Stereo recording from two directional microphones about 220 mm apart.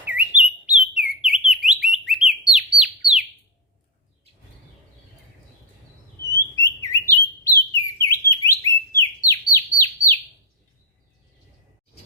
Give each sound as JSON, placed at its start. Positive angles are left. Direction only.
{"t": 0.0, "sound": "chirp", "side_deg": -5}
{"t": 1.0, "sound": "bird", "side_deg": -5}
{"t": 6.3, "sound": "bird", "side_deg": 15}